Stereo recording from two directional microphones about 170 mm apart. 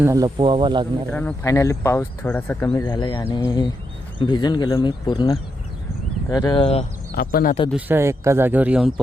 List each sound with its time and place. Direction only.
0.0 s speech: 20° right (ahead or behind)
1.1 s speech: 15° left (ahead or behind)
2.7 s speech: 25° left (ahead or behind)
7.2 s speech: 60° left (ahead or behind)
7.7 s speech: 10° right (ahead or behind)